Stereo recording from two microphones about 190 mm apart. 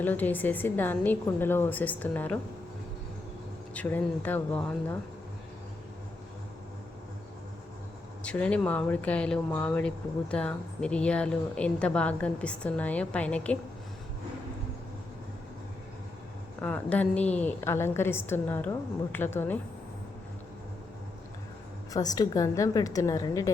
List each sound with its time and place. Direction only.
0.0 s speech: 10° left (ahead or behind)
3.8 s speech: 10° left (ahead or behind)
8.2 s speech: 5° left (ahead or behind)
16.6 s speech: 10° left (ahead or behind)
21.9 s a woman's voice: 20° left (ahead or behind)